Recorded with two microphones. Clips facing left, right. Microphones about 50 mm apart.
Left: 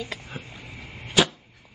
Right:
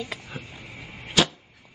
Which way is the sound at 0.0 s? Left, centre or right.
Centre.